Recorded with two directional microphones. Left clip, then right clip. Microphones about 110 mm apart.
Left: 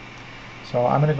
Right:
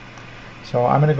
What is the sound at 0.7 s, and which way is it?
Speech, 45° right (ahead or behind).